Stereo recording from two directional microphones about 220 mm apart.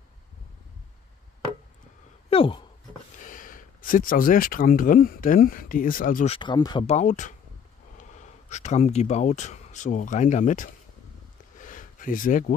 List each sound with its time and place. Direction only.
2.2 s speech: 25° left (ahead or behind)
3.2 s speech: 35° left (ahead or behind)
6.3 s speech: 20° left (ahead or behind)
11.5 s a sound: 35° left (ahead or behind)